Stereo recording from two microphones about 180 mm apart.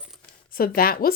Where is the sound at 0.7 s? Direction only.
55° left (ahead or behind).